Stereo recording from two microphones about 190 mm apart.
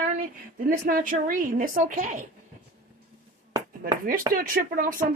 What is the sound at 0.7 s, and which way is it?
A woman's voice, 50° right (ahead or behind).